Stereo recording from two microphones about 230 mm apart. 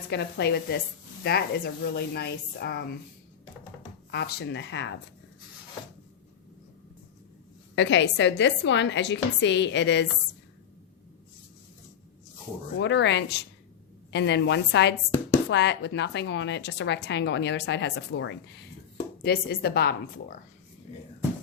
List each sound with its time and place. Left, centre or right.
0.1 s a woman's voice: left
4.1 s a woman's voice: left
7.8 s a woman's voice: left
12.8 s a woman's voice: left